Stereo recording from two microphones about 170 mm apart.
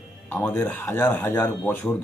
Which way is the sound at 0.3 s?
10° left (ahead or behind).